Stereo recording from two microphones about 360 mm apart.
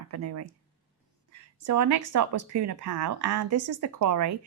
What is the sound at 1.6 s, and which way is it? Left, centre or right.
Speech, right.